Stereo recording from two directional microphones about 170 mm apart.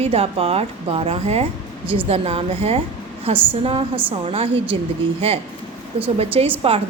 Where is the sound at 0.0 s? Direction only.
35° right (ahead or behind).